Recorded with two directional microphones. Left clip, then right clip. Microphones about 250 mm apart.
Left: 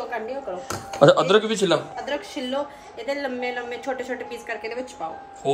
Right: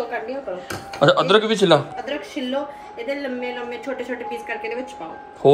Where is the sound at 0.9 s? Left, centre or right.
Centre.